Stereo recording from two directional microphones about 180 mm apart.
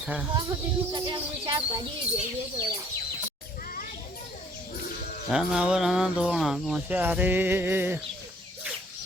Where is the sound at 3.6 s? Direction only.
50° left (ahead or behind).